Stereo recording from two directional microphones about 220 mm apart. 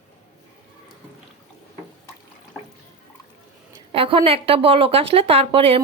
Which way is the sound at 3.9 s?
25° right (ahead or behind).